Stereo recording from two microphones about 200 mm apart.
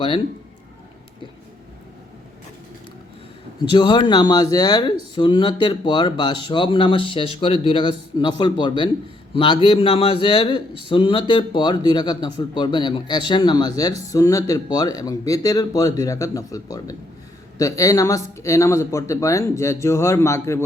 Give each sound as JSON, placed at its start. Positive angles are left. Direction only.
{"t": 3.7, "sound": "speech", "side_deg": 25}